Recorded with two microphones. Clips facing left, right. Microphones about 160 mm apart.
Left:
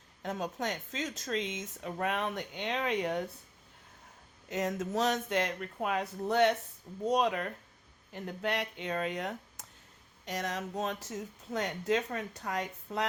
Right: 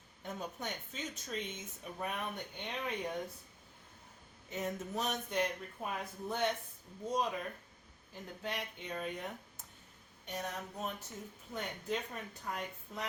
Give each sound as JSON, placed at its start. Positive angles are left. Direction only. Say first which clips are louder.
{"t": 0.2, "sound": "speech", "louder": "left 7 dB", "side_deg": 90}
{"t": 4.4, "sound": "speech", "louder": "left 6 dB", "side_deg": 90}